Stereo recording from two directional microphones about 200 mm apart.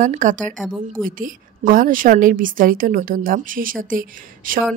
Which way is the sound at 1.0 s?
45° right (ahead or behind).